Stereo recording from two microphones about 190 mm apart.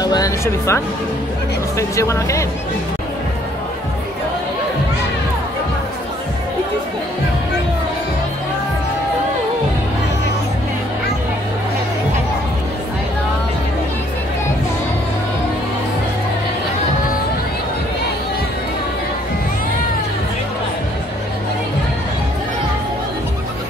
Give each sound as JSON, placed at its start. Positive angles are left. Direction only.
{"t": 0.0, "sound": "speech", "side_deg": 20}